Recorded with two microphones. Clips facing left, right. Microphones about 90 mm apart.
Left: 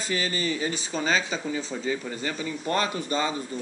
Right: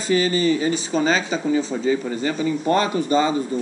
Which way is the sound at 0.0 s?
5° right (ahead or behind).